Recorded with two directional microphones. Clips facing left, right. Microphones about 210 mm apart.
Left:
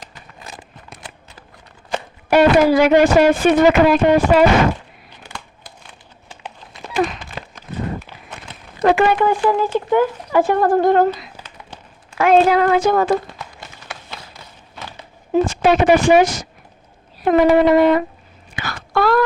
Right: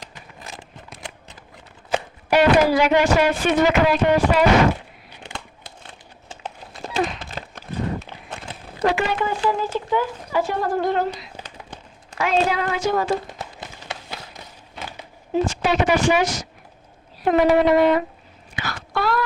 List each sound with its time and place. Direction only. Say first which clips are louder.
2.3 s speech: left 4 dB; 50° left (ahead or behind)
5.2 s crumpling: right 1 dB; 25° right (ahead or behind)
8.8 s speech: left 7 dB; 55° left (ahead or behind)
12.1 s speech: left 8 dB; 55° left (ahead or behind)
15.3 s a woman's voice: left 6 dB; 50° left (ahead or behind)
18.5 s wail: left 6 dB; 50° left (ahead or behind)